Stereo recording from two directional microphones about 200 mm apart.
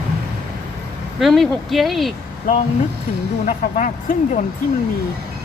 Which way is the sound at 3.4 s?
40° left (ahead or behind).